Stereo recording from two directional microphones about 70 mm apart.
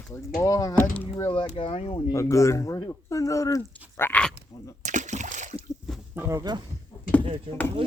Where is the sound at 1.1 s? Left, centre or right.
Left.